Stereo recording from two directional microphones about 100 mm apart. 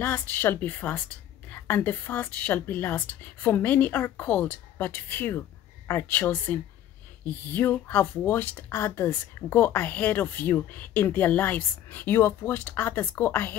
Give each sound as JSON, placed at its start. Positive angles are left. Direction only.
{"t": 0.0, "sound": "speech", "side_deg": 20}